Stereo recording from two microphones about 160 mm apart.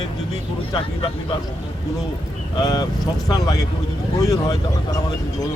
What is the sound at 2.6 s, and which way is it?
Speech, 25° left (ahead or behind).